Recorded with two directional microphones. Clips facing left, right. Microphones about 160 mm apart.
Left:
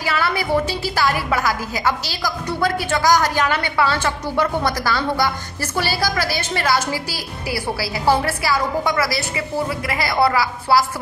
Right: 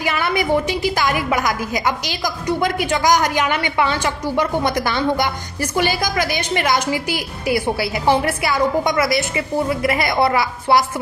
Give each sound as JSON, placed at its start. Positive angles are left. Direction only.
{"t": 0.0, "sound": "a woman's voice", "side_deg": -20}